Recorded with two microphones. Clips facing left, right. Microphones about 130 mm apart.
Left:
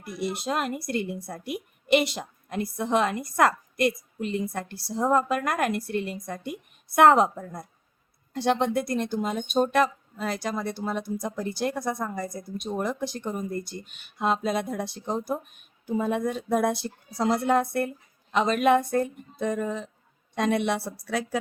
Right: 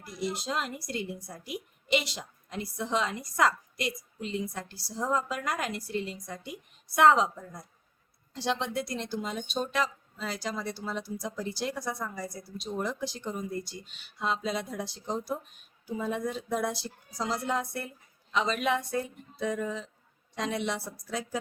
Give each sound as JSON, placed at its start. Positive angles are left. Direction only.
{"t": 0.0, "sound": "speech", "side_deg": 60}